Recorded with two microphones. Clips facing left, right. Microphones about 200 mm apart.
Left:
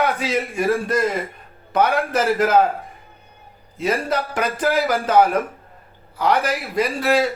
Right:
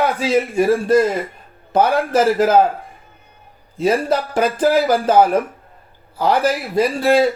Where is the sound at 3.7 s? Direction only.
30° right (ahead or behind).